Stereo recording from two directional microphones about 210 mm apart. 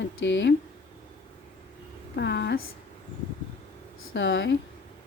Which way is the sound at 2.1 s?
55° left (ahead or behind).